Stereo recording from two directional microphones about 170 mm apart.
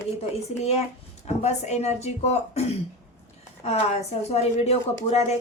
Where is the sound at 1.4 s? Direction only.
40° left (ahead or behind).